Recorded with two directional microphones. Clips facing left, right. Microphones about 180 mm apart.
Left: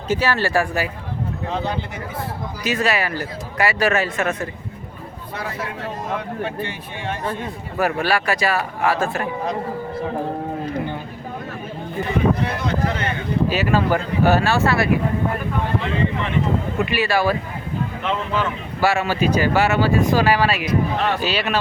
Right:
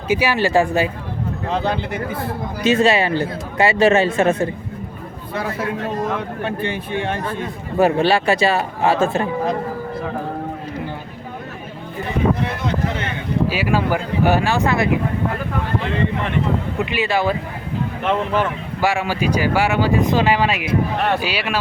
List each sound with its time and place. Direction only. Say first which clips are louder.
0.1 s speech: right 3 dB; 15° right (ahead or behind)
1.6 s speech: right 4 dB; 70° right (ahead or behind)
2.6 s speech: right 6 dB; 25° right (ahead or behind)
7.8 s speech: right 5 dB; 25° right (ahead or behind)
13.5 s speech: left 2 dB; 10° right (ahead or behind)
16.7 s speech: left 1 dB; 20° right (ahead or behind)
18.8 s speech: left 1 dB; 15° right (ahead or behind)